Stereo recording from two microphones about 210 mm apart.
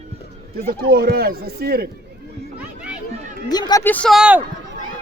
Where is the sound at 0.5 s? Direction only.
45° right (ahead or behind).